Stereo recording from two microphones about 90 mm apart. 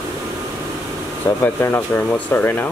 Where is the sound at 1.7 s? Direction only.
25° left (ahead or behind).